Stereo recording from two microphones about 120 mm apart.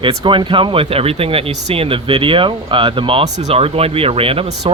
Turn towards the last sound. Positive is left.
turn(degrees=-50)  # may be behind; listen again after turning